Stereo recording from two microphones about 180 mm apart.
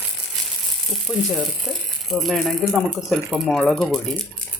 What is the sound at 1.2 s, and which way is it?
Speech, centre (ahead or behind).